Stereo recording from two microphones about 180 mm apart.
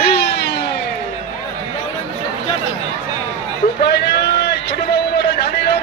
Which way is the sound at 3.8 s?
65° left (ahead or behind).